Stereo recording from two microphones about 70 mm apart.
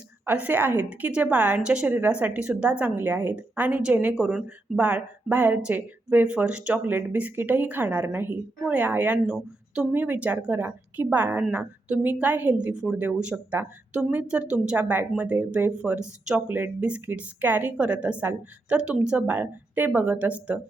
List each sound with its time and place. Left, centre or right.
0.3 s a woman's voice: right; by 4.8 s centre
4.8 s speech: right
6.8 s a woman's voice: right
8.0 s a woman's voice: right
8.7 s a woman's voice: right
9.2 s speech: centre
9.9 s a woman's voice: right